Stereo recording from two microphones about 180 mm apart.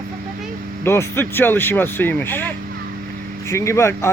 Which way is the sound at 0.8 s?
15° left (ahead or behind).